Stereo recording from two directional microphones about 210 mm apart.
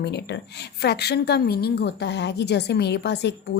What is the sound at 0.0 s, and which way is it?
A woman's voice, 55° left (ahead or behind).